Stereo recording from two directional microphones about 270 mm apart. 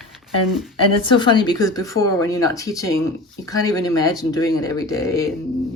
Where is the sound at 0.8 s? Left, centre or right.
Centre.